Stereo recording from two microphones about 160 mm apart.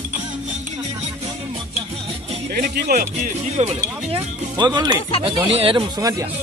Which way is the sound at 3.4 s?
40° right (ahead or behind).